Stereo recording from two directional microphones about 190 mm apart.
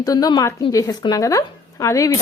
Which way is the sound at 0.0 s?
20° left (ahead or behind).